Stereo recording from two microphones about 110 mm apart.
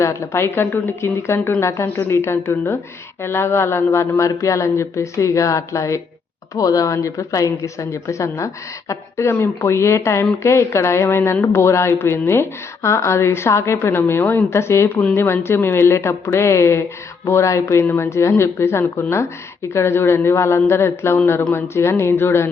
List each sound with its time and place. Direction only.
0.0 s speech: 25° left (ahead or behind)